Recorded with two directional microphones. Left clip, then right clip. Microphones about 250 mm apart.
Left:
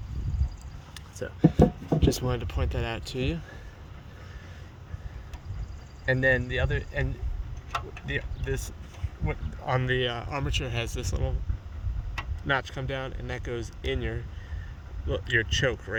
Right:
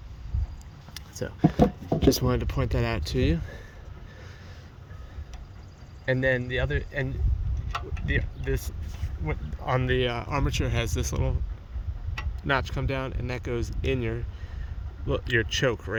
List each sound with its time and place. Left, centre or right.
1.2 s speech: right
6.1 s speech: right
8.4 s speech: right
12.5 s speech: right